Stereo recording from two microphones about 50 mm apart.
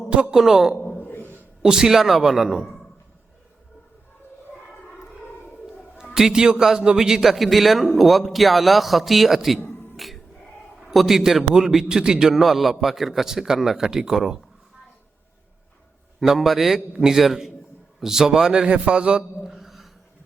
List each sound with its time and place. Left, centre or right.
0.1 s a man's voice: centre
0.8 s a sound: left
1.6 s a man's voice: centre
6.1 s a man's voice: centre
10.0 s music: centre
10.8 s a man's voice: centre
16.2 s a man's voice: centre; by 19.2 s right
19.5 s a sound: centre